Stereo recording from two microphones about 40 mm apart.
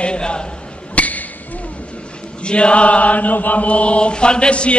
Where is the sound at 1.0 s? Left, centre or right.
Left.